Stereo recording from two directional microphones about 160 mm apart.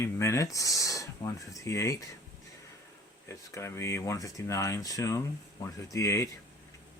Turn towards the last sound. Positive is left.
turn(degrees=20)  # may be behind; listen again after turning